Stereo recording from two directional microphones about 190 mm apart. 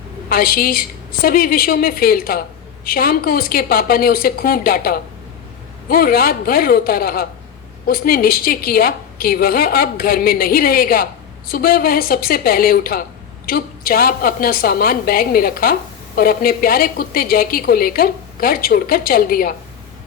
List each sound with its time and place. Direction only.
0.3 s a woman's voice: 50° left (ahead or behind)